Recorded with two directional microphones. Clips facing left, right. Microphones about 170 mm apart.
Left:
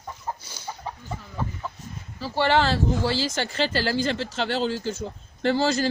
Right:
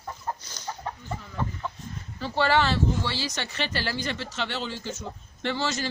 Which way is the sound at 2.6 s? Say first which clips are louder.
Left 2 dB; 35° left (ahead or behind).